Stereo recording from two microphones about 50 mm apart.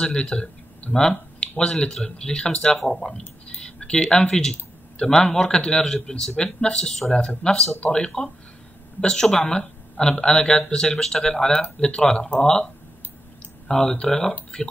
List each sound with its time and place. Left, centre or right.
0.0 s speech: centre
0.9 s a sound: centre
1.6 s speech: centre
13.7 s speech: centre